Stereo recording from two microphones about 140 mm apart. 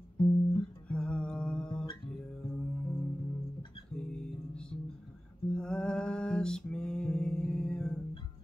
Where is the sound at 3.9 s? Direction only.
5° left (ahead or behind).